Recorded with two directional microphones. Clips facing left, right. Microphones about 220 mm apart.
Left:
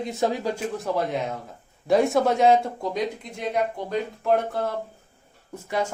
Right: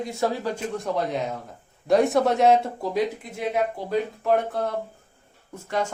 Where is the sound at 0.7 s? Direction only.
Centre (ahead or behind).